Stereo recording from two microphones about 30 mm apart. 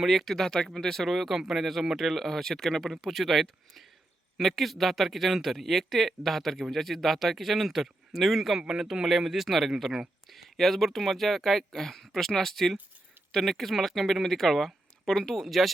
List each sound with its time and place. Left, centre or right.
0.0 s speech: centre
0.3 s speech: centre
1.0 s speech: centre
10.6 s speech: centre